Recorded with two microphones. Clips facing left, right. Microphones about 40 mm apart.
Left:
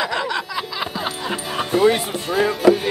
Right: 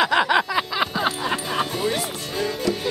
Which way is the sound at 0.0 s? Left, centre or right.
Right.